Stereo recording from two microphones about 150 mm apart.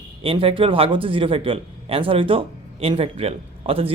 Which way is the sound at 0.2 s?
35° right (ahead or behind).